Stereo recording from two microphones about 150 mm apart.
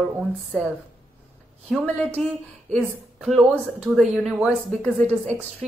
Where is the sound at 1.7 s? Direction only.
5° left (ahead or behind).